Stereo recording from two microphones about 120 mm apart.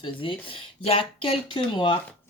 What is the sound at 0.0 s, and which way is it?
Speech, 45° left (ahead or behind).